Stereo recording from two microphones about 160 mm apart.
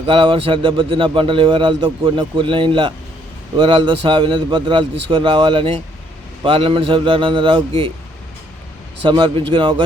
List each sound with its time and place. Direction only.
0.1 s speech: 35° right (ahead or behind)
9.0 s a man's voice: 30° right (ahead or behind)